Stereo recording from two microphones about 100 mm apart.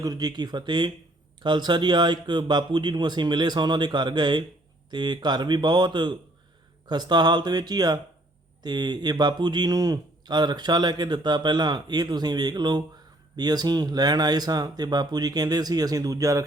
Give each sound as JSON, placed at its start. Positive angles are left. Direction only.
{"t": 0.0, "sound": "a man's voice", "side_deg": -40}